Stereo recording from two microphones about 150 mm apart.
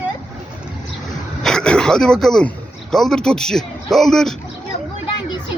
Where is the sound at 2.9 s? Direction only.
5° left (ahead or behind).